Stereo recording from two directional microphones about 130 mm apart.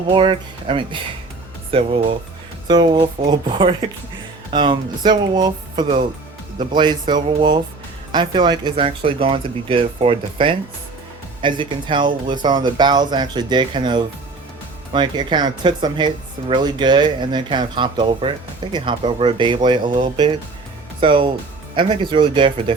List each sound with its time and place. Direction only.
0.1 s speech: 40° right (ahead or behind)